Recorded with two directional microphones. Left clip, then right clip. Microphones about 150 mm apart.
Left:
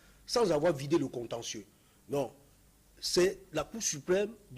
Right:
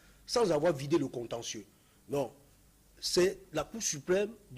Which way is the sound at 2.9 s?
25° left (ahead or behind).